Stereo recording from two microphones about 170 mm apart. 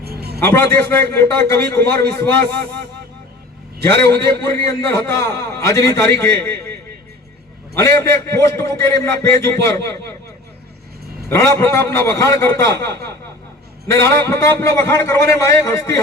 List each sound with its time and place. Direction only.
0.0 s a sound: 70° right (ahead or behind)
0.4 s a man's voice: 15° left (ahead or behind)
4.0 s a man's voice: 15° left (ahead or behind)
7.8 s a man's voice: 15° left (ahead or behind)
11.3 s a man's voice: 15° left (ahead or behind)